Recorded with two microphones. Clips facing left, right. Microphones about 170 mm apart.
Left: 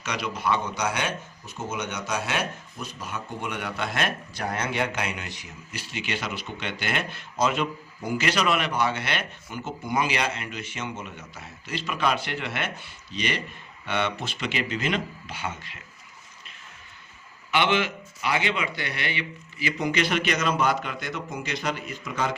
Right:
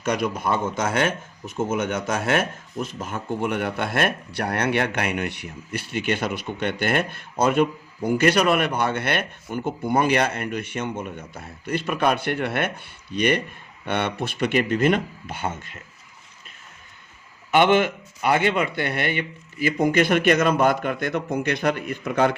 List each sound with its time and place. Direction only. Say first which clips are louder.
0.0 s speech: right 6 dB; 50° right (ahead or behind)
17.5 s speech: right 6 dB; 50° right (ahead or behind)